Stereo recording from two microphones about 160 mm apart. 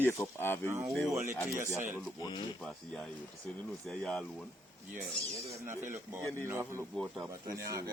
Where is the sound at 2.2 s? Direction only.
25° left (ahead or behind).